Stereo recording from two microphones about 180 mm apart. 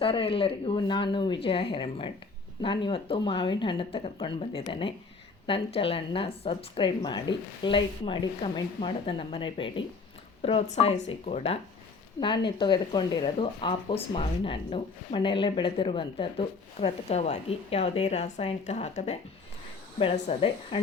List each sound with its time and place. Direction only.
0.0 s speech: 30° left (ahead or behind)
12.2 s speech: 25° left (ahead or behind)